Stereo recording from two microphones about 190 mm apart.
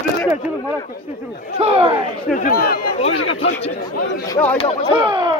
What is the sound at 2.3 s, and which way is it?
Speech, 50° left (ahead or behind).